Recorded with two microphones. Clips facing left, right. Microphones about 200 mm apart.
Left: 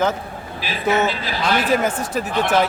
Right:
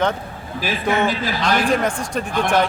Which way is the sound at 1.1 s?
45° right (ahead or behind).